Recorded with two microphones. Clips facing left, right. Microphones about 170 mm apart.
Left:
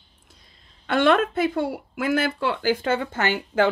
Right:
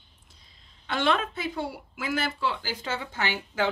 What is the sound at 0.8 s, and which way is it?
Speech, 55° left (ahead or behind).